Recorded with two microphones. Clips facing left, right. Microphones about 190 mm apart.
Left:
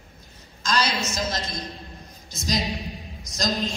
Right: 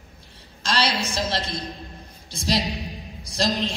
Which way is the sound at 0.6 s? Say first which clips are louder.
Right 1 dB; 30° right (ahead or behind).